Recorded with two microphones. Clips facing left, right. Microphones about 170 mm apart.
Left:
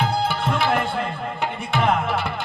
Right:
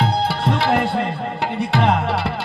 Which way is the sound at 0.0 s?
35° right (ahead or behind).